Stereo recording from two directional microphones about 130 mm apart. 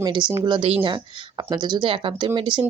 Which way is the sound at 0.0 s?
35° right (ahead or behind).